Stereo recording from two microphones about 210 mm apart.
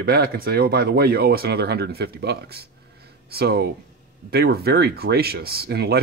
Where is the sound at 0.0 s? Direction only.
50° right (ahead or behind).